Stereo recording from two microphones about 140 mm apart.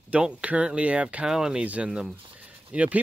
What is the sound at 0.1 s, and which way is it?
Speech, 10° right (ahead or behind).